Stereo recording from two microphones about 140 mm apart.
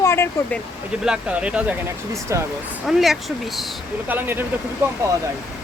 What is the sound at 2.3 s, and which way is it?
Speech, 20° right (ahead or behind).